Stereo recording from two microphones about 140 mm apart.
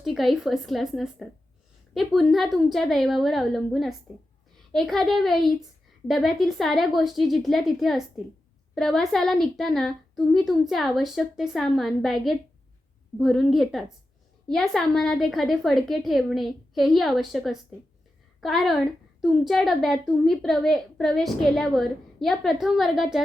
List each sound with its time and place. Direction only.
0.0 s a woman's voice: centre (ahead or behind)